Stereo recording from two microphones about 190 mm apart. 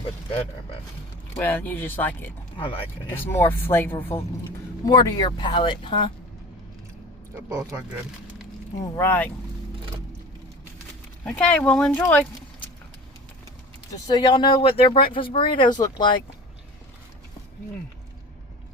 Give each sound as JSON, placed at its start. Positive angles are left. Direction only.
{"t": 1.4, "sound": "speech", "side_deg": 10}
{"t": 2.6, "sound": "speech", "side_deg": 25}
{"t": 3.1, "sound": "speech", "side_deg": 10}
{"t": 8.8, "sound": "speech", "side_deg": 10}
{"t": 11.3, "sound": "speech", "side_deg": 5}
{"t": 12.0, "sound": "a sound", "side_deg": 5}
{"t": 13.9, "sound": "speech", "side_deg": 20}